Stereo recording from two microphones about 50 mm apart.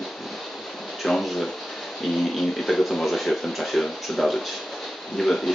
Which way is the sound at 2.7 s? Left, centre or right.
Centre.